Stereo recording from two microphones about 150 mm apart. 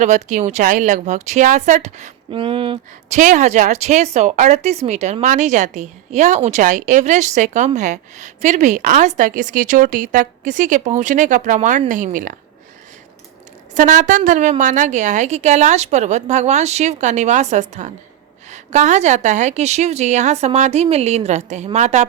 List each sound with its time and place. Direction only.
0.0 s speech: 55° right (ahead or behind)
2.3 s speech: 35° right (ahead or behind)
3.1 s a woman's voice: 55° right (ahead or behind)
13.7 s a woman's voice: 60° right (ahead or behind)